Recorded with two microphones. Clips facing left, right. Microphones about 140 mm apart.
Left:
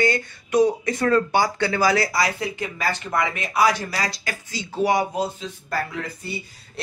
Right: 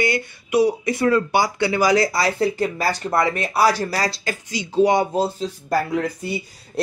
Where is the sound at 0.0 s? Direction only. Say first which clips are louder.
Even; 10° right (ahead or behind); by 5.8 s 35° right (ahead or behind).